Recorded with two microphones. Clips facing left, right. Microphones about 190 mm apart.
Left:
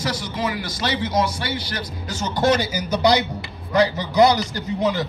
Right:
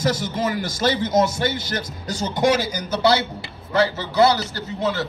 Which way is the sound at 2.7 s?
15° left (ahead or behind).